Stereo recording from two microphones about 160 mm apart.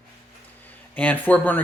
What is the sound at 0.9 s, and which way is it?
Speech, 10° left (ahead or behind).